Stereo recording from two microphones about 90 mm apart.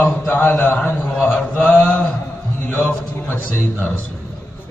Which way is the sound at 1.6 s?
15° left (ahead or behind).